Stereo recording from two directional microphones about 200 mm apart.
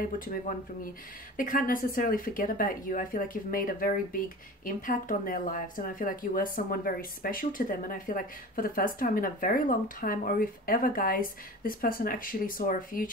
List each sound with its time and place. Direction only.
0.0 s speech: 45° left (ahead or behind)